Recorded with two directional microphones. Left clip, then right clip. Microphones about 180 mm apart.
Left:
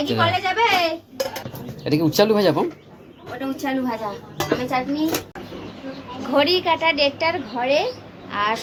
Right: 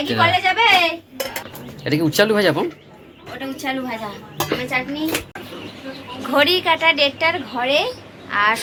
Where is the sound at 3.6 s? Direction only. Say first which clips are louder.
Right 1 dB; 40° left (ahead or behind).